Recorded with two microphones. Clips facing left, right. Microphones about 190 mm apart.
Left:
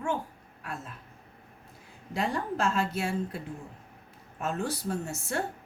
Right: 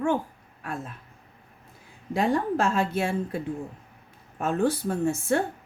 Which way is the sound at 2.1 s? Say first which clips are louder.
Right 6 dB; 55° right (ahead or behind).